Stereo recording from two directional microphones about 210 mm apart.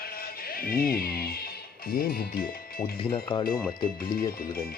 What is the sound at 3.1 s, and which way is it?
Speech, 25° left (ahead or behind).